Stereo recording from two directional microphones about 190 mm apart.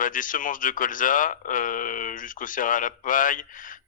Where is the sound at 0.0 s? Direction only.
45° left (ahead or behind).